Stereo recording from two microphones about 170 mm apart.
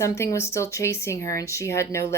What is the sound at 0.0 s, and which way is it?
Speech, 20° left (ahead or behind).